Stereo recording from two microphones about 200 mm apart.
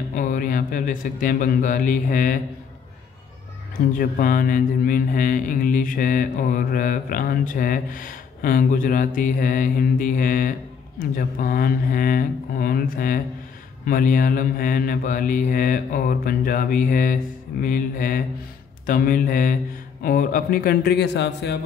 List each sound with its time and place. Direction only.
0.1 s speech: 40° left (ahead or behind)
3.9 s speech: 45° left (ahead or behind)